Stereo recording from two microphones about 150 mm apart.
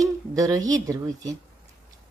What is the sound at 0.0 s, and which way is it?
Speech, 20° right (ahead or behind).